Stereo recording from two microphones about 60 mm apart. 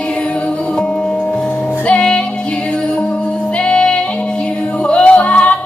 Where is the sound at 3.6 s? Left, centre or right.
Centre.